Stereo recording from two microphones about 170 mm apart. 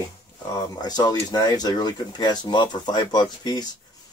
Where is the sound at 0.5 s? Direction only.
25° left (ahead or behind).